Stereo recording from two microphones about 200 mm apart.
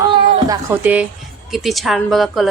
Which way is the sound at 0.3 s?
20° right (ahead or behind).